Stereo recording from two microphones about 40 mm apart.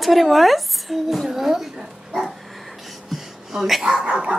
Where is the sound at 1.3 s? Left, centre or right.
Centre.